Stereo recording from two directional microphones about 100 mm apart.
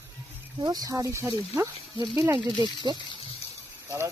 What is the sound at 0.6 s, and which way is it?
Speech, 40° right (ahead or behind).